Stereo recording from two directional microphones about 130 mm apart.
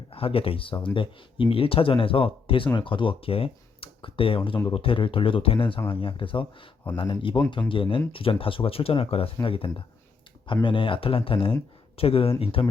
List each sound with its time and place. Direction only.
0.1 s speech: 45° left (ahead or behind)